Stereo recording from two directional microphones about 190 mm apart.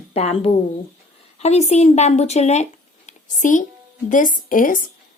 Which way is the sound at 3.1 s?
40° left (ahead or behind).